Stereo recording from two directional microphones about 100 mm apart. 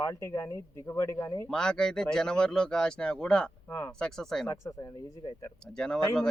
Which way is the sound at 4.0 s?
5° left (ahead or behind).